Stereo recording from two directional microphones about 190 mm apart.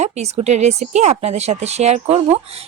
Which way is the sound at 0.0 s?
35° right (ahead or behind).